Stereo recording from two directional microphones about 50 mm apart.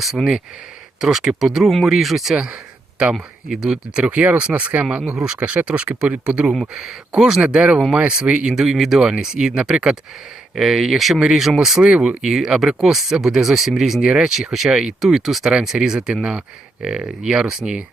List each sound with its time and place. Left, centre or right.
0.2 s speech: centre
1.0 s speech: centre
3.0 s speech: centre
3.5 s speech: centre
3.9 s speech: right
5.2 s speech: right
6.7 s speech: centre
8.6 s speech: centre
10.5 s speech: centre
12.2 s speech: centre
14.1 s speech: centre
15.1 s speech: centre